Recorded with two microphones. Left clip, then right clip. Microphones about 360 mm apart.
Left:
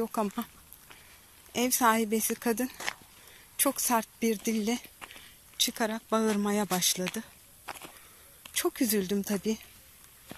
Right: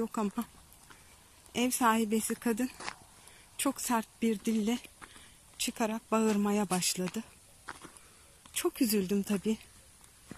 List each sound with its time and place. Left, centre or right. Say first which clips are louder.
0.0 s speech: left 3 dB; centre
1.5 s speech: left 3 dB; centre